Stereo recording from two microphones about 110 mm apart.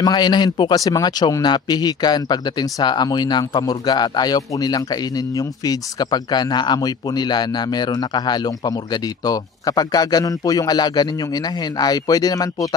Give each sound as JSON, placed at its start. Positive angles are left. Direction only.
{"t": 0.0, "sound": "a man's voice", "side_deg": 40}